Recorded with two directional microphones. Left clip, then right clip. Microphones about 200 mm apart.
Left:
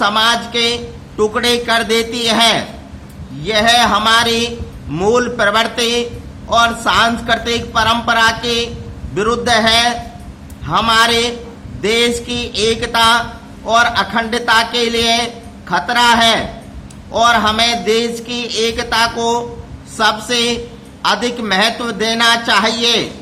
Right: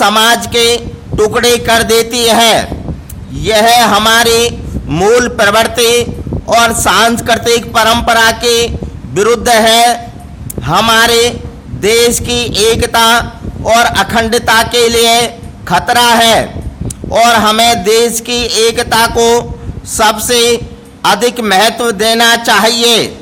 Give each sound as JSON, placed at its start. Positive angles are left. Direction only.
{"t": 0.0, "sound": "a man's voice", "side_deg": -55}